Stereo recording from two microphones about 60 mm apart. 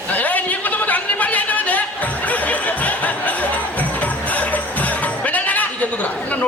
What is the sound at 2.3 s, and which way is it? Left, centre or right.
Music, left.